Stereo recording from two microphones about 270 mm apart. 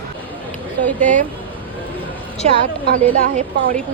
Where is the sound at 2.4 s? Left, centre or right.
Right.